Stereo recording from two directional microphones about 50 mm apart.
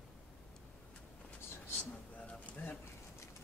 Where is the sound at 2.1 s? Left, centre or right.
Left.